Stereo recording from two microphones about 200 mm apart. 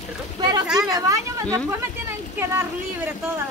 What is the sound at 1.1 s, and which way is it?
Speech, 15° right (ahead or behind).